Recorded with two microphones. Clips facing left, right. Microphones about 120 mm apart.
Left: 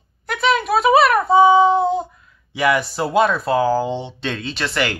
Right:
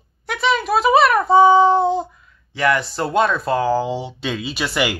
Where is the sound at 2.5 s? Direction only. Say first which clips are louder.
Left 1 dB; 10° left (ahead or behind); by 4.9 s 10° right (ahead or behind).